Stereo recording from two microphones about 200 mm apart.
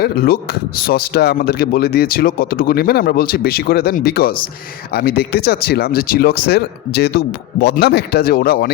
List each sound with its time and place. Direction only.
0.0 s speech: 50° left (ahead or behind)